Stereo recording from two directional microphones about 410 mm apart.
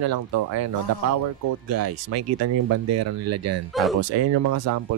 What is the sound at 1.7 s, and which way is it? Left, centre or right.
Speech, right.